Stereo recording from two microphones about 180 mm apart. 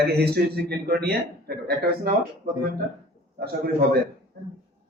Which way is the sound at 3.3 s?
60° right (ahead or behind).